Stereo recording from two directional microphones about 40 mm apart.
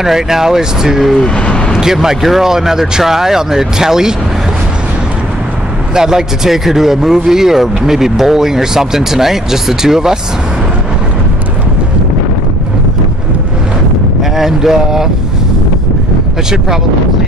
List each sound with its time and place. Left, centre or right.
0.0 s speech: centre
1.2 s speech: left
1.7 s speech: centre
5.9 s speech: centre
14.3 s speech: centre